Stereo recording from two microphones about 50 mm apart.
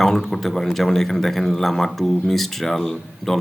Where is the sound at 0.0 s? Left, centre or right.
Centre.